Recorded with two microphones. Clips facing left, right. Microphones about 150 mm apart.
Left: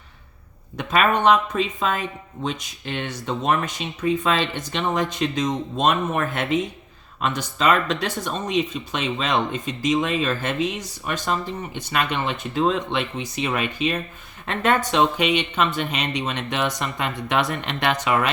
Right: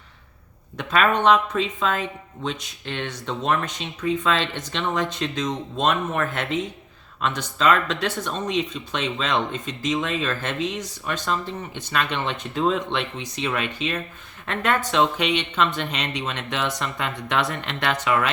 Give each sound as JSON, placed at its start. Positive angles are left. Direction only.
{"t": 0.8, "sound": "speech", "side_deg": 15}